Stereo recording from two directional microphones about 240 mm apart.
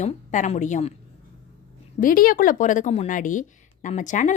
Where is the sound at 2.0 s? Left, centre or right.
Left.